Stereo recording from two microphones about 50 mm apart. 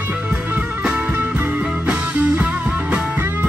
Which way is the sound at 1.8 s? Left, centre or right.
Right.